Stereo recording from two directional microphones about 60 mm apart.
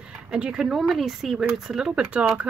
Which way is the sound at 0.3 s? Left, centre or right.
Centre.